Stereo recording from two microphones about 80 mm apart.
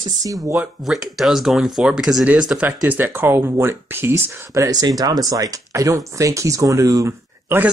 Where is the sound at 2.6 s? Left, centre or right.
Right.